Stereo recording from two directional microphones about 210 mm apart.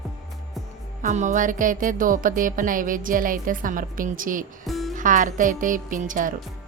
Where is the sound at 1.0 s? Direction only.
35° right (ahead or behind).